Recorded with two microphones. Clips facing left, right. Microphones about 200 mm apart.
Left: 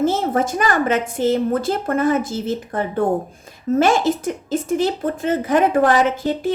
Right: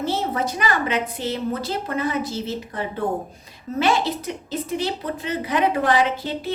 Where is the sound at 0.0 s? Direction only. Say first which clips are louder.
Left 6 dB; 50° left (ahead or behind).